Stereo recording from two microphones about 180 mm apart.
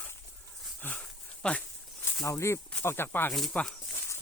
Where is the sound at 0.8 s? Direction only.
10° left (ahead or behind).